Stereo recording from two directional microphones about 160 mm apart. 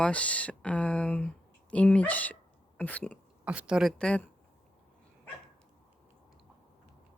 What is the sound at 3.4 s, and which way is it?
Speech, 10° right (ahead or behind).